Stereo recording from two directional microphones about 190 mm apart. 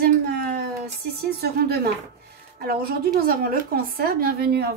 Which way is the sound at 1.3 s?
55° right (ahead or behind).